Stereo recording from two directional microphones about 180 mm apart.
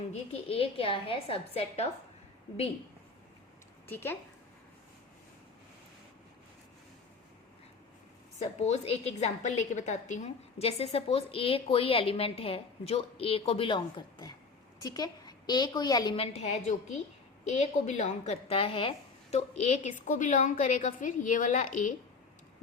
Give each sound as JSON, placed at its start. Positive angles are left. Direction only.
{"t": 0.1, "sound": "a woman's voice", "side_deg": 35}
{"t": 3.8, "sound": "a woman's voice", "side_deg": 10}
{"t": 8.4, "sound": "a woman's voice", "side_deg": 35}